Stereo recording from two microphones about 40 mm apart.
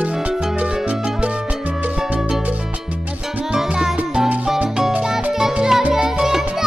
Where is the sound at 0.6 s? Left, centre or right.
Right.